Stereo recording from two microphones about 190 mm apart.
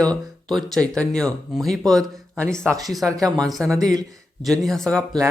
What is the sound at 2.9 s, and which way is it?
Speech, centre (ahead or behind).